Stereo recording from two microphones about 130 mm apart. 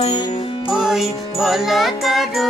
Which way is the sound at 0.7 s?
5° right (ahead or behind).